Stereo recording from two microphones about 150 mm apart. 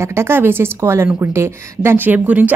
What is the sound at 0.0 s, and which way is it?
A woman's voice, 15° right (ahead or behind).